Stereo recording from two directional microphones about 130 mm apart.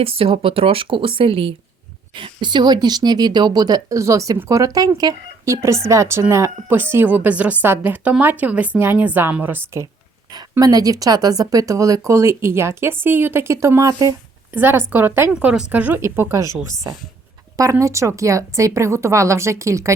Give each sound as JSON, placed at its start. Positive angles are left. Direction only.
{"t": 0.0, "sound": "speech", "side_deg": -45}
{"t": 10.6, "sound": "a woman's voice", "side_deg": -30}
{"t": 17.6, "sound": "speech", "side_deg": -25}